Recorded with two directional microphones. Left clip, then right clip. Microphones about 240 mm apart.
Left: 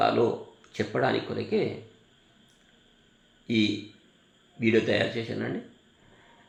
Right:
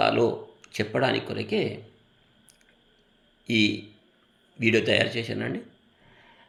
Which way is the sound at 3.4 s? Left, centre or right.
Right.